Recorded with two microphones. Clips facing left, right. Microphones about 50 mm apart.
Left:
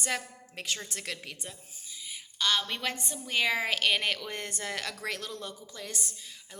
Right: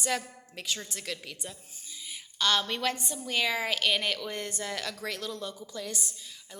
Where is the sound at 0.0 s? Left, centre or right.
Left.